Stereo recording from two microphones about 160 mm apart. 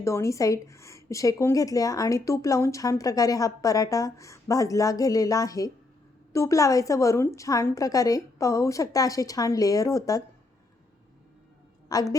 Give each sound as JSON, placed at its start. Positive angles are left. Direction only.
{"t": 0.0, "sound": "a woman's voice", "side_deg": 20}
{"t": 11.9, "sound": "a woman's voice", "side_deg": 25}